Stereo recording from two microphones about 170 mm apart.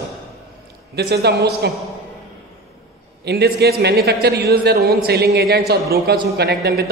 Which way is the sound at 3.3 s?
70° right (ahead or behind).